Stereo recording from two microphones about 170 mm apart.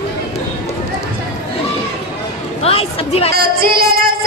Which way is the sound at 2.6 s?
35° left (ahead or behind).